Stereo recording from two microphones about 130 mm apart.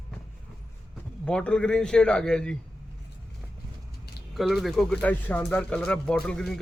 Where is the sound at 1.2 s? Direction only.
10° left (ahead or behind).